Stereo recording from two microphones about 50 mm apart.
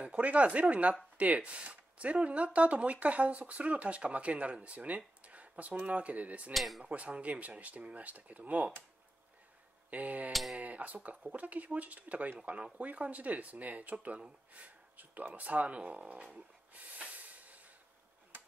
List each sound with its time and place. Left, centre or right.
0.0 s speech: right
6.5 s speech: centre
6.8 s speech: right
9.8 s speech: right
10.3 s speech: centre
10.6 s speech: right